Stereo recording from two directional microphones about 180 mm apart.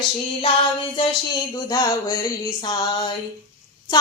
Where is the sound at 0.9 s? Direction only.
25° left (ahead or behind).